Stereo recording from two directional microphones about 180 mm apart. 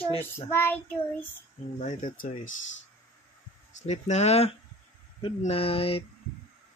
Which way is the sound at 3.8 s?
40° left (ahead or behind).